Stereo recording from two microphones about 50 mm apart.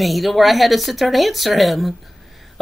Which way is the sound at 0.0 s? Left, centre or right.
Centre.